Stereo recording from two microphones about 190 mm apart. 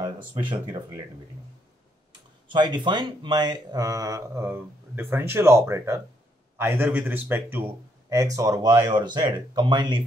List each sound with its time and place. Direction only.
0.0 s speech: 25° right (ahead or behind)
2.5 s speech: 25° right (ahead or behind)